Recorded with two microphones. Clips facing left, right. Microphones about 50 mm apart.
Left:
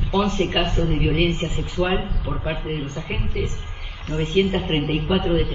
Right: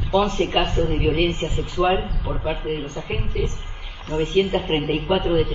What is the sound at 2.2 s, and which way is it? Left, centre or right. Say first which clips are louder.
Speech: right 1 dB; right.